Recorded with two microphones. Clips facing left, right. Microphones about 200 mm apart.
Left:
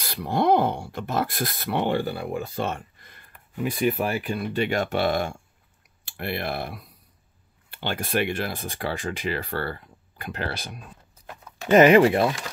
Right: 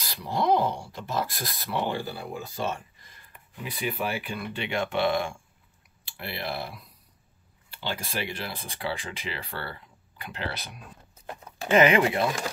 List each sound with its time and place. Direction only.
0.0 s speech: 55° left (ahead or behind)
3.6 s speech: 45° left (ahead or behind)